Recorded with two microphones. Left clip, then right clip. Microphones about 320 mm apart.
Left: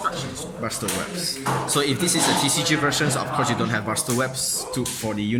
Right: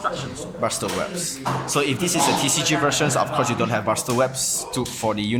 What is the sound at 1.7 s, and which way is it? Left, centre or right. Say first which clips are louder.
Speech: right 2 dB; centre.